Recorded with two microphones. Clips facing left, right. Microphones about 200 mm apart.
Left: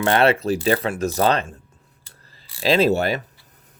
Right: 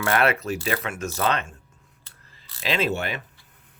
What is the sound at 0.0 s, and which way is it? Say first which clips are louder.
Speech: left 5 dB; 30° left (ahead or behind).